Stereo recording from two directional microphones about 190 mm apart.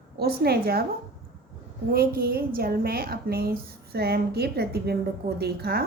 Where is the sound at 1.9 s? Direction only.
50° right (ahead or behind).